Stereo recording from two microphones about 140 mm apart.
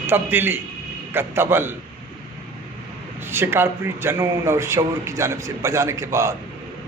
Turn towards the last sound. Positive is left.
turn(degrees=-20)  # may be behind; listen again after turning